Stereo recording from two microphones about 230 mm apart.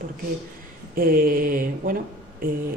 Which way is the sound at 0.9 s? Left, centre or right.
Right.